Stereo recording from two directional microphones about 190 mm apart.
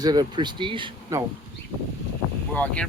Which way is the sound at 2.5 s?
10° left (ahead or behind).